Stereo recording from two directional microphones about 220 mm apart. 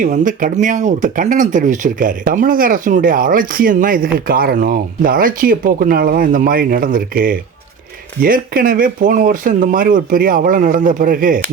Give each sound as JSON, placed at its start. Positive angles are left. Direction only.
{"t": 0.0, "sound": "speech", "side_deg": -35}